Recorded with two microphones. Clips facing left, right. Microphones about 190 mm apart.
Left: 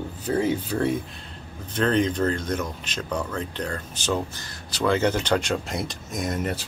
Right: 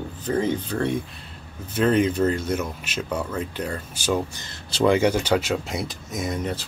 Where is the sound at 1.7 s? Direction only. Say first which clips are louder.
Right 2 dB; 10° right (ahead or behind).